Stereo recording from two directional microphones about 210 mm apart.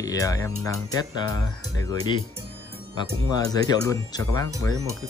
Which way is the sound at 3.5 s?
15° left (ahead or behind).